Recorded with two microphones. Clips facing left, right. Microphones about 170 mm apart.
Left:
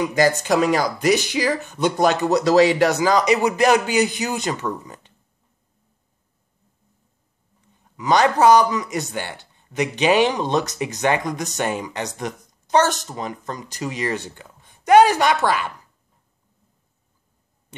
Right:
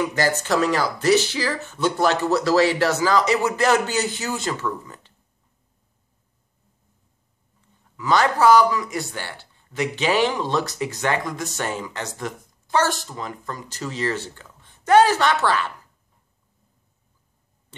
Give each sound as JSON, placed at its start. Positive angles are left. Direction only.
{"t": 0.0, "sound": "speech", "side_deg": 15}
{"t": 8.0, "sound": "speech", "side_deg": 20}